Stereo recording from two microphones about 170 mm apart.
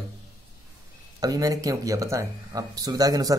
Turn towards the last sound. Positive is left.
turn(degrees=-20)  # may be behind; listen again after turning